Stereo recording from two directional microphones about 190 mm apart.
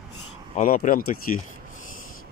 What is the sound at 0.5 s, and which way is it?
Speech, 45° left (ahead or behind).